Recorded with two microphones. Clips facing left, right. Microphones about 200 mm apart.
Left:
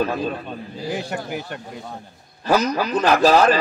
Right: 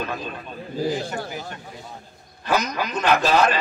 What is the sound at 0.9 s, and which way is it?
Speech, 60° left (ahead or behind).